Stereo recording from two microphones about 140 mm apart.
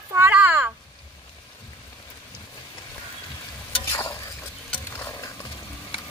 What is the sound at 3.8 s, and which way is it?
Stir, 20° left (ahead or behind).